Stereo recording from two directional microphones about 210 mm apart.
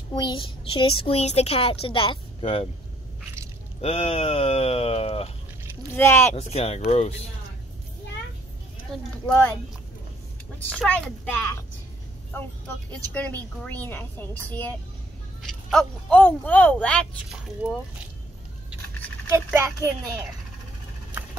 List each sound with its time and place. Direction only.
0.1 s a child's voice: 25° left (ahead or behind)
3.8 s a child's voice: 25° left (ahead or behind)
5.9 s a woman's voice: 10° left (ahead or behind)
6.3 s a child's voice: 30° left (ahead or behind)
10.6 s a woman's voice: 5° left (ahead or behind)
19.3 s a child's voice: 15° right (ahead or behind)